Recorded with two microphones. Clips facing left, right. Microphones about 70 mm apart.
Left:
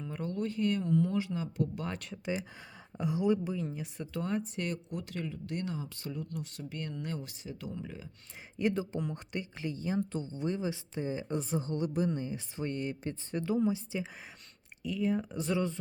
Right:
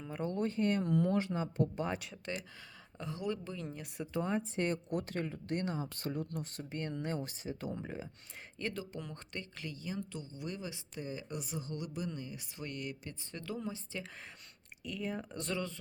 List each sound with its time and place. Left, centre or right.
0.3 s speech: right
1.9 s speech: centre
2.2 s speech: centre
4.0 s speech: centre
4.9 s speech: right
8.5 s speech: centre
9.0 s speech: centre
10.1 s speech: left; by 14.1 s centre
14.8 s speech: centre
15.5 s speech: left